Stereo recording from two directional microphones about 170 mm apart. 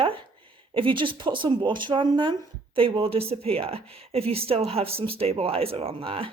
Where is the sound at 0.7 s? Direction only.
30° right (ahead or behind).